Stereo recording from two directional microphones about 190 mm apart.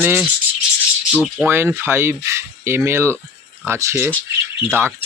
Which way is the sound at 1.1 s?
5° left (ahead or behind).